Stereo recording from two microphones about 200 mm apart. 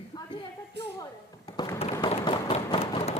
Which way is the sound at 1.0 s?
20° left (ahead or behind).